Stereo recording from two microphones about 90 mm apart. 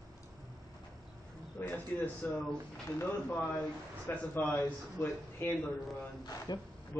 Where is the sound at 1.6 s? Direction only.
30° left (ahead or behind).